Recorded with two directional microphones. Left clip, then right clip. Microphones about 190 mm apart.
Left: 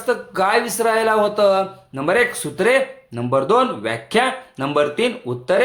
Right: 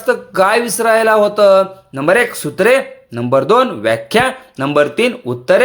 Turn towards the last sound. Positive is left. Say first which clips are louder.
# right 6 dB
turn(degrees=-35)  # may be behind; listen again after turning